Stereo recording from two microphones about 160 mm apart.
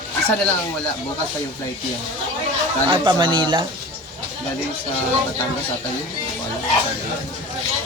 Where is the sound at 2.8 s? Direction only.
30° right (ahead or behind).